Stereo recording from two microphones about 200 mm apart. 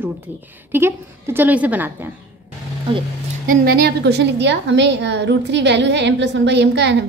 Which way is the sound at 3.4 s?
50° right (ahead or behind).